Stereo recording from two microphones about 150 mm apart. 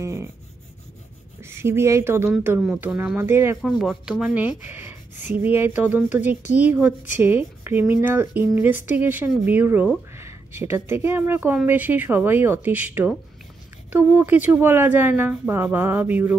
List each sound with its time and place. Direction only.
0.0 s rub: 20° right (ahead or behind)
1.4 s speech: 15° right (ahead or behind)
3.6 s speech: centre (ahead or behind)